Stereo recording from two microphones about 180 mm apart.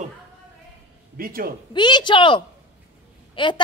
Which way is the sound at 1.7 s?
25° left (ahead or behind).